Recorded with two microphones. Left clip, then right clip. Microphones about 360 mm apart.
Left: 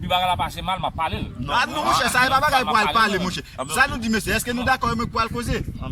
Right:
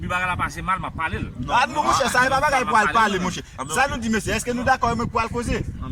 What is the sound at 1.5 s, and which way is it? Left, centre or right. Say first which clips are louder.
A man's voice: right 1 dB; centre.